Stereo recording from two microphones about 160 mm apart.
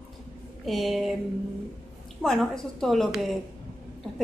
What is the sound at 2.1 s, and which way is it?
A woman's voice, centre (ahead or behind).